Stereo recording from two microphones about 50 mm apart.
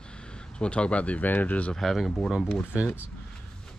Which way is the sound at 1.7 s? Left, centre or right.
Centre.